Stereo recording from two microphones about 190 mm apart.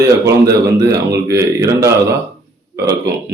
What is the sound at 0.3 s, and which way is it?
Speech, 15° right (ahead or behind).